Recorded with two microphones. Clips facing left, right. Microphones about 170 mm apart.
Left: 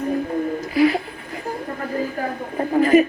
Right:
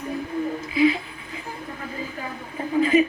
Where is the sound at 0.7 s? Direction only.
40° left (ahead or behind).